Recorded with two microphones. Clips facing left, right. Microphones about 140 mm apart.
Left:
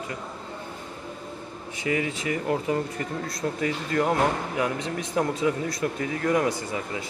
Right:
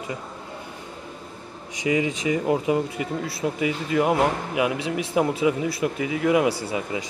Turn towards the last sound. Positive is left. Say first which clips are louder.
# right 3 dB
turn(degrees=-15)  # may be behind; listen again after turning